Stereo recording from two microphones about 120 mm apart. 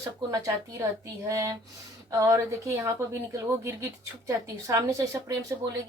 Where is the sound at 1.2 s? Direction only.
30° right (ahead or behind).